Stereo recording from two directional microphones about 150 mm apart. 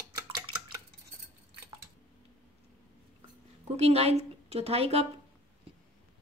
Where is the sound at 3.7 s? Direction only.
45° right (ahead or behind).